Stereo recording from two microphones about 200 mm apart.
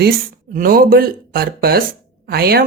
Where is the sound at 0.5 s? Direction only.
45° right (ahead or behind).